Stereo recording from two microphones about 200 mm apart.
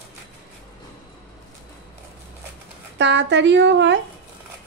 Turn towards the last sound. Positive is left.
turn(degrees=-65)  # may be behind; listen again after turning